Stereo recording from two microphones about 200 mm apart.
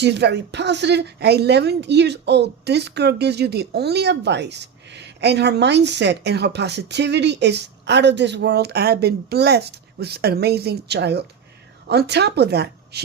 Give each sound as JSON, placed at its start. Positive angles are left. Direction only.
{"t": 0.0, "sound": "speech", "side_deg": -60}